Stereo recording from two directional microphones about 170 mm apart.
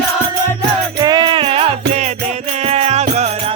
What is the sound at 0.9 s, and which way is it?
Music, 25° right (ahead or behind).